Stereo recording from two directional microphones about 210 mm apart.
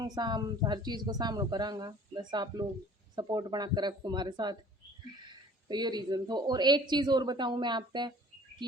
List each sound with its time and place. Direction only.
0.0 s speech: 20° right (ahead or behind)
5.6 s speech: 20° right (ahead or behind)